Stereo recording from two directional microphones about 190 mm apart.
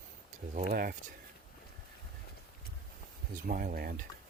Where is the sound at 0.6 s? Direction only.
50° right (ahead or behind).